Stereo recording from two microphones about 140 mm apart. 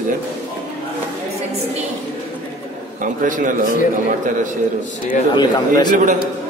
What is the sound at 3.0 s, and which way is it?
A man's voice, 70° right (ahead or behind).